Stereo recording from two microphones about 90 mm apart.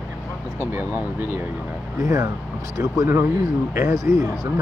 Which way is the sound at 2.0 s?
40° right (ahead or behind).